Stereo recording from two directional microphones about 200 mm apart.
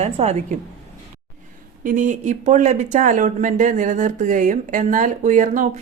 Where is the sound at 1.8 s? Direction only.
40° right (ahead or behind).